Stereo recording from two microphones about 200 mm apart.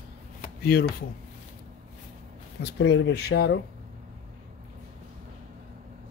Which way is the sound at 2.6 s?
60° left (ahead or behind).